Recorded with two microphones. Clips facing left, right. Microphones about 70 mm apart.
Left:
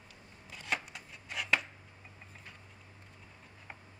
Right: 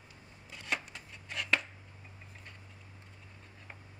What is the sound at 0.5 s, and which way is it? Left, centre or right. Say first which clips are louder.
Chopping: even; centre.